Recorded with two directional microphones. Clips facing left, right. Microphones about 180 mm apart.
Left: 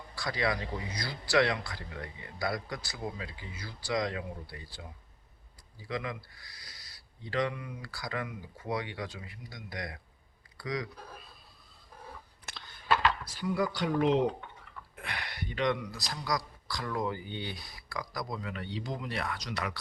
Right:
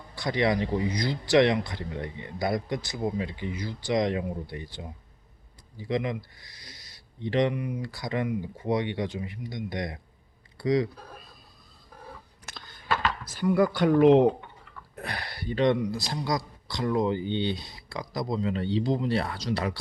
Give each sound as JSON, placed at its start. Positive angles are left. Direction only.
{"t": 0.2, "sound": "speech", "side_deg": -20}
{"t": 5.9, "sound": "speech", "side_deg": -20}
{"t": 13.2, "sound": "speech", "side_deg": -50}
{"t": 14.9, "sound": "speech", "side_deg": -35}